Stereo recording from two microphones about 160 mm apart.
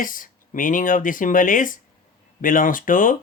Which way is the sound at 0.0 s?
55° left (ahead or behind).